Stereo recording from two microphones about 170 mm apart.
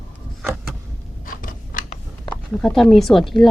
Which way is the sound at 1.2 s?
55° left (ahead or behind).